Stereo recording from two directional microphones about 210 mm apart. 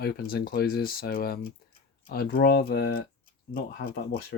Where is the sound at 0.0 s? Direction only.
45° left (ahead or behind).